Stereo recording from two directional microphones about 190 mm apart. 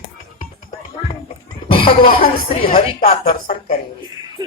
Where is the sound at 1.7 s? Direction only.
30° left (ahead or behind).